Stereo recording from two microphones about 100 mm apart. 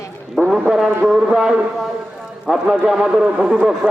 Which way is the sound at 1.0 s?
5° right (ahead or behind).